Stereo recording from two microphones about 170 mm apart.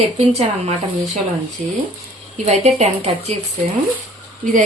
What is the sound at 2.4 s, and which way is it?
Speech, 40° right (ahead or behind).